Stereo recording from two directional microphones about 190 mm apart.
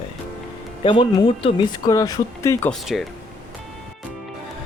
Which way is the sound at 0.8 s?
25° left (ahead or behind).